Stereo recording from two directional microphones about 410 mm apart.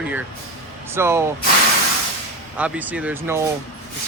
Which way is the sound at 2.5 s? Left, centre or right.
Centre.